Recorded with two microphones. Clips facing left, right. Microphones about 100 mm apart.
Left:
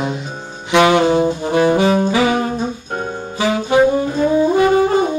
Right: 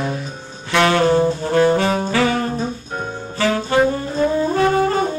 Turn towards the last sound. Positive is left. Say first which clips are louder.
# left 3 dB
turn(degrees=15)  # may be behind; listen again after turning